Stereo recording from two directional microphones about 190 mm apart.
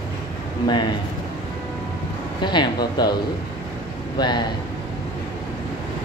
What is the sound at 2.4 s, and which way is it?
Speech, 25° left (ahead or behind).